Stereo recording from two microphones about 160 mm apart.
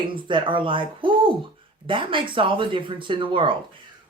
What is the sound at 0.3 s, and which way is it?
Speech, 30° right (ahead or behind).